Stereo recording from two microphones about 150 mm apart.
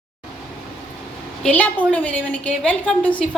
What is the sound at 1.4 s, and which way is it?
A woman's voice, 10° left (ahead or behind).